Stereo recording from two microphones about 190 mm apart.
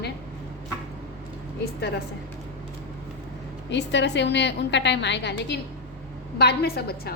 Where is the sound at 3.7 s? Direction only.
65° left (ahead or behind).